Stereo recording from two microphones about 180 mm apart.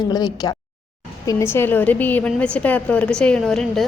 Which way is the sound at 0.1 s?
20° left (ahead or behind).